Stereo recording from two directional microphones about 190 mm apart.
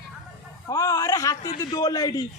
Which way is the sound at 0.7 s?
20° left (ahead or behind).